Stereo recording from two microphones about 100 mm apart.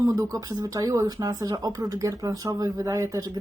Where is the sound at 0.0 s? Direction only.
35° right (ahead or behind).